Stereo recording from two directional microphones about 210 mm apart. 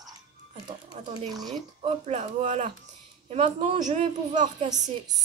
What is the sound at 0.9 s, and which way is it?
Speech, 20° right (ahead or behind).